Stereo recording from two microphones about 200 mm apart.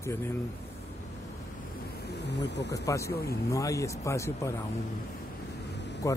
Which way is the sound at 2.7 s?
15° left (ahead or behind).